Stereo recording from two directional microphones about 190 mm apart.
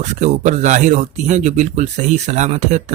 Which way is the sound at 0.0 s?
40° right (ahead or behind).